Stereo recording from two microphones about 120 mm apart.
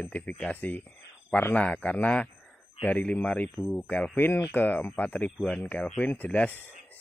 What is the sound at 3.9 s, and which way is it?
Speech, 10° left (ahead or behind).